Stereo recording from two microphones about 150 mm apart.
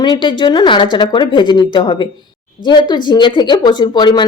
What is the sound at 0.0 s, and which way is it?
Speech, 30° left (ahead or behind).